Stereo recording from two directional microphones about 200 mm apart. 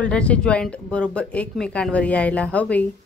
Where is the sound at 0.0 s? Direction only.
5° left (ahead or behind).